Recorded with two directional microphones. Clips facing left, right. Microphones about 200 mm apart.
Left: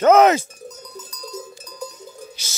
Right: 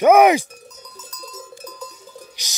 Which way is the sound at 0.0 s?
15° right (ahead or behind).